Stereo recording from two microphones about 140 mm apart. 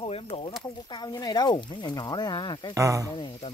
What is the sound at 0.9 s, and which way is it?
Speech, 30° left (ahead or behind).